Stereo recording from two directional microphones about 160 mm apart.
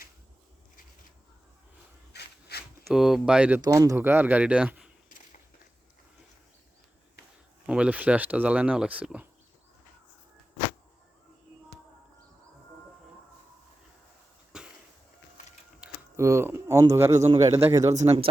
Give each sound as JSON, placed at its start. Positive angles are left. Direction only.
{"t": 2.1, "sound": "a sound", "side_deg": 85}
{"t": 2.9, "sound": "speech", "side_deg": -5}
{"t": 3.6, "sound": "speech", "side_deg": -20}
{"t": 5.0, "sound": "a sound", "side_deg": 55}
{"t": 7.7, "sound": "speech", "side_deg": -5}
{"t": 14.5, "sound": "a sound", "side_deg": -5}
{"t": 15.8, "sound": "mechanisms", "side_deg": -5}
{"t": 16.1, "sound": "speech", "side_deg": -15}
{"t": 18.0, "sound": "speech", "side_deg": -40}